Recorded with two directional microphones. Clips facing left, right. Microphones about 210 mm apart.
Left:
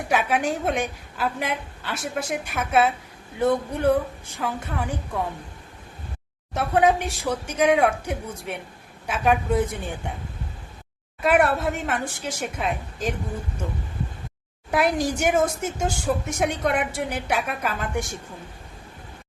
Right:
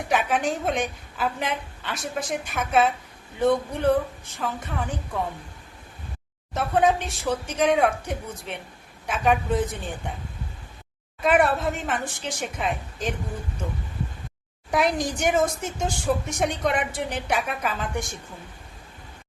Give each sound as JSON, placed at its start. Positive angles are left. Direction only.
{"t": 0.1, "sound": "a woman's voice", "side_deg": 10}
{"t": 6.5, "sound": "a woman's voice", "side_deg": 10}
{"t": 11.2, "sound": "a woman's voice", "side_deg": 5}
{"t": 14.7, "sound": "a woman's voice", "side_deg": 5}